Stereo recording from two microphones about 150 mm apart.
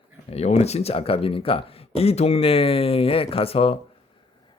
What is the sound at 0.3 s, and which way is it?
Speech, 45° left (ahead or behind).